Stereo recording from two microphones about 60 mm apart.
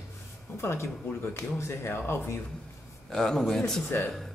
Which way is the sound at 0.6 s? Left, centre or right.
Left.